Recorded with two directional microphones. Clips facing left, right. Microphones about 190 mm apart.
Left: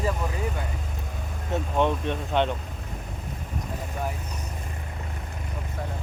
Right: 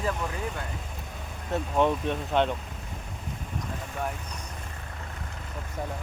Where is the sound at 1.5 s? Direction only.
Centre (ahead or behind).